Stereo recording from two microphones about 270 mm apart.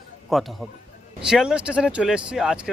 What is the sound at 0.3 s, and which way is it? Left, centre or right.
Speech, centre.